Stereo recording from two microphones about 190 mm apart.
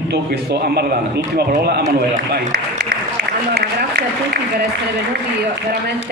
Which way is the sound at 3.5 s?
55° right (ahead or behind).